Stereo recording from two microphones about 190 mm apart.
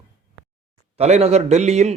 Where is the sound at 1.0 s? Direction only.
35° right (ahead or behind).